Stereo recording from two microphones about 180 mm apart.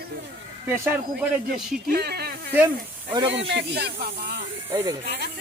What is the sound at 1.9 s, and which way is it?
Speech, 60° right (ahead or behind).